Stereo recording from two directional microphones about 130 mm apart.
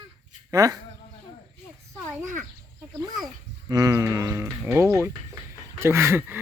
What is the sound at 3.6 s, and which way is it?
Speech, 25° right (ahead or behind).